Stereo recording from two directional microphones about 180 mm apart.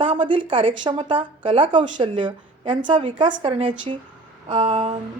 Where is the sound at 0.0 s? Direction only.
30° right (ahead or behind).